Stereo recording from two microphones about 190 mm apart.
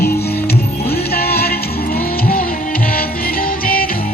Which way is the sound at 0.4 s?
55° left (ahead or behind).